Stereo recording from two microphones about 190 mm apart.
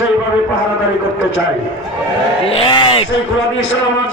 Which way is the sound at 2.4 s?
30° left (ahead or behind).